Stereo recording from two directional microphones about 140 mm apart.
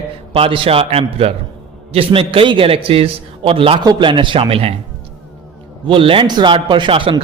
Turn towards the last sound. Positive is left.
turn(degrees=-40)  # may be behind; listen again after turning